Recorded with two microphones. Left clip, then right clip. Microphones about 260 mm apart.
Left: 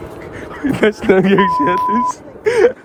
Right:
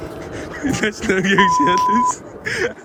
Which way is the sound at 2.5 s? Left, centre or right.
Centre.